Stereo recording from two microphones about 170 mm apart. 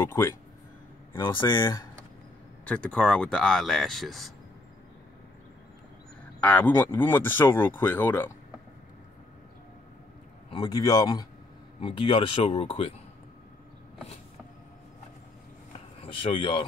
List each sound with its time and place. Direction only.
0.0 s speech: 15° left (ahead or behind)
1.1 s speech: 25° left (ahead or behind)
2.6 s speech: 5° left (ahead or behind)
6.4 s speech: 10° left (ahead or behind)
10.5 s speech: 25° left (ahead or behind)
16.0 s speech: 30° left (ahead or behind)